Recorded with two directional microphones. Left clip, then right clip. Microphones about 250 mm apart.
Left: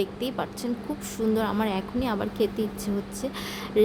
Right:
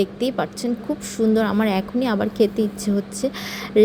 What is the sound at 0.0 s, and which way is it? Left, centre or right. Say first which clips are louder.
Speech: right 7 dB; right.